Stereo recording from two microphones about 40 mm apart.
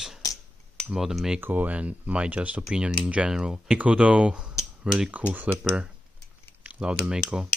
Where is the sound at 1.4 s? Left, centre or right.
Right.